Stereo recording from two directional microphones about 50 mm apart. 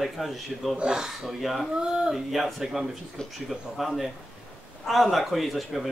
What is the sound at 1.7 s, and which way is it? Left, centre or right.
A man's voice, centre.